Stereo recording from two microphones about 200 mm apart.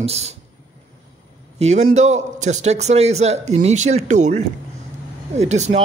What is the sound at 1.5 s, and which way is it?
A man's voice, 35° right (ahead or behind).